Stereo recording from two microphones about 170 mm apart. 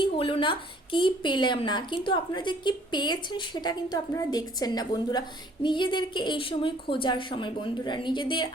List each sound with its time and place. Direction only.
0.0 s a woman's voice: 30° left (ahead or behind)